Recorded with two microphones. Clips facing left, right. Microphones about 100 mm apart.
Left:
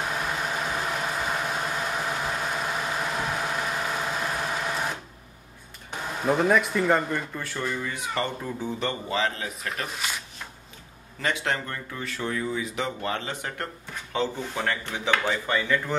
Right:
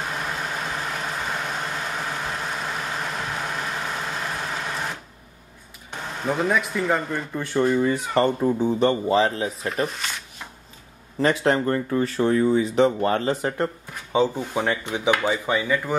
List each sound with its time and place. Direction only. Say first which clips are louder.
0.3 s vehicle: even; centre (ahead or behind)
5.9 s speech: left 1 dB; 5° left (ahead or behind)
7.3 s speech: right 10 dB; 20° right (ahead or behind)
7.6 s speech: right 10 dB; 35° right (ahead or behind)
9.8 s speech: right 1 dB; 5° left (ahead or behind)
11.1 s speech: right 8 dB; 35° right (ahead or behind)
14.1 s speech: right 7 dB; 15° right (ahead or behind)